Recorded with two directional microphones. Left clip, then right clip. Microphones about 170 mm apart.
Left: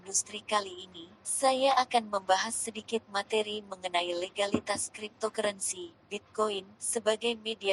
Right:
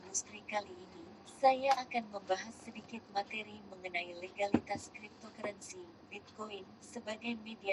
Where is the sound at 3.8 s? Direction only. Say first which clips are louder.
Left 8 dB; 15° left (ahead or behind).